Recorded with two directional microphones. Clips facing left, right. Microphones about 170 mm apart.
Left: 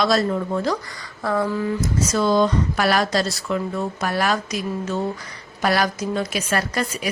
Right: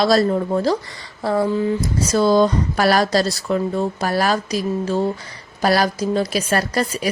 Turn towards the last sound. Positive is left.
turn(degrees=-35)  # may be behind; listen again after turning